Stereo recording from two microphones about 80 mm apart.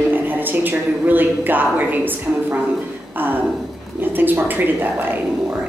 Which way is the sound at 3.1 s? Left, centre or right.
Right.